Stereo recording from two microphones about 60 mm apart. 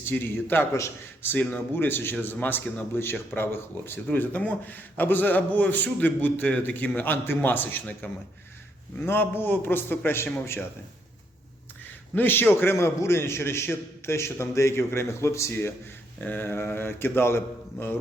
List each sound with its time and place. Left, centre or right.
0.0 s speech: left
12.1 s speech: left
12.7 s a man's voice: left
16.2 s speech: left